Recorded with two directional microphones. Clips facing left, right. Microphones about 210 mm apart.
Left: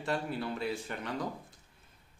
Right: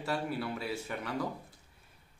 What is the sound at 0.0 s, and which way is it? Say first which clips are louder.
A man's voice: even; 5° right (ahead or behind).